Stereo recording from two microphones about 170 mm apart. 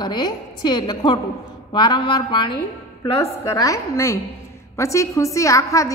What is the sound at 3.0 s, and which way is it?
A woman's voice, 15° left (ahead or behind).